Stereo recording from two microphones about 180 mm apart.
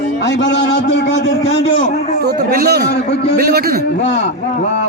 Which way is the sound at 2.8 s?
65° left (ahead or behind).